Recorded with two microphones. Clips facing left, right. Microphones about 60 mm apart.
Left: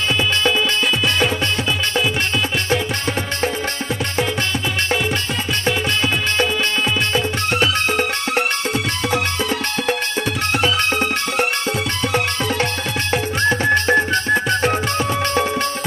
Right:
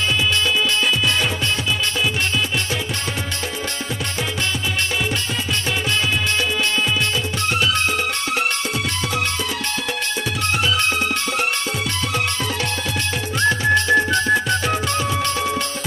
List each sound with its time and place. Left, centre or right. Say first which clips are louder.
8.4 s music: left 2 dB; centre
13.1 s music: left 2 dB; left
15.0 s music: left 3 dB; left